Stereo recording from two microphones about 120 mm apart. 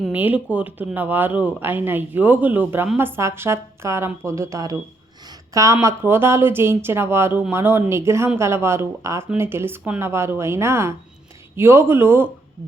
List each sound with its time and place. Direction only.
0.1 s speech: 15° right (ahead or behind)